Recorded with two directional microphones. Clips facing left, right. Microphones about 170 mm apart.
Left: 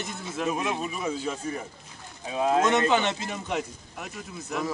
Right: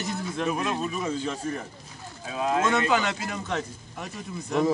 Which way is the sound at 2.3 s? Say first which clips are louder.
Left 2 dB; 25° left (ahead or behind).